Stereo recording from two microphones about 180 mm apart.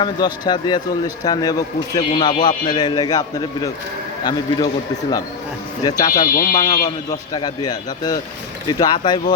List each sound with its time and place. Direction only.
0.0 s a man's voice: 25° left (ahead or behind)
5.8 s a man's voice: 20° left (ahead or behind)